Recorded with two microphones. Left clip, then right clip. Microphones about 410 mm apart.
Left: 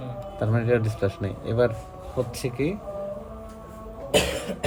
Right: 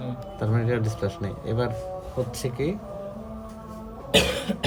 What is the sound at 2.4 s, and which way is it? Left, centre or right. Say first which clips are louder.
Speech: left 1 dB; left.